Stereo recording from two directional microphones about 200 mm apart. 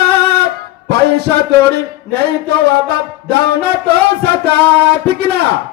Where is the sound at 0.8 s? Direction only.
55° right (ahead or behind).